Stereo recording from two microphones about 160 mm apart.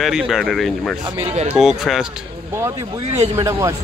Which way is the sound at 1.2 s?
45° right (ahead or behind).